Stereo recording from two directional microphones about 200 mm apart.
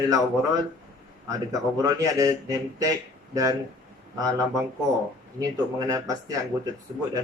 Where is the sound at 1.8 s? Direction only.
20° right (ahead or behind).